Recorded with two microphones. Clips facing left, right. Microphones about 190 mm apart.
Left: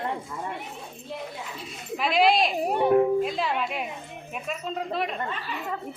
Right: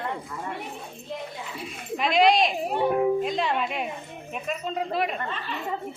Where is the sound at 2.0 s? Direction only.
5° left (ahead or behind).